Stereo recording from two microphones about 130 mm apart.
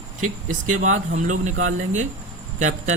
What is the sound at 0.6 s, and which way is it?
A man's voice, 75° right (ahead or behind).